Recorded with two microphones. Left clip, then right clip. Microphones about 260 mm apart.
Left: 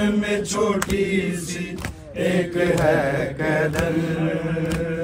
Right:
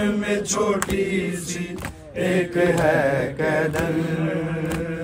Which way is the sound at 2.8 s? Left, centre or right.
Right.